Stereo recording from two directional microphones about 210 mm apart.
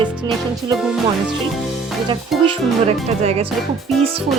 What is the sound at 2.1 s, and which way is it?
Speech, 25° right (ahead or behind).